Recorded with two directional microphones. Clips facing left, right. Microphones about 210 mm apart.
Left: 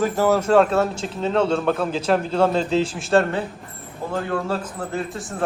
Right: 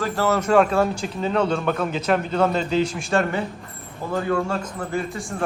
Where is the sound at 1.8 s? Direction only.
30° left (ahead or behind).